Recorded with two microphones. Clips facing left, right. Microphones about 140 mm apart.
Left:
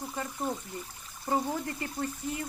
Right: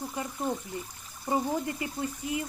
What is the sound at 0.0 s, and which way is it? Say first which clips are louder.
Speech: right 1 dB; 15° right (ahead or behind).